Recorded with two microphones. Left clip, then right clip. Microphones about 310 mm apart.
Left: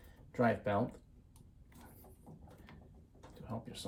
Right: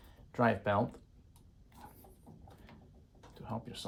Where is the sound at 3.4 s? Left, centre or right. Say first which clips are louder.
Right 3 dB; centre.